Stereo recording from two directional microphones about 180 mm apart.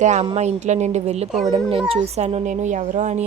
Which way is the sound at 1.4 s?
20° right (ahead or behind).